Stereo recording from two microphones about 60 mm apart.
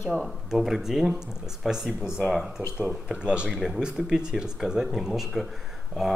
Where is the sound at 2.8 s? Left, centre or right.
Centre.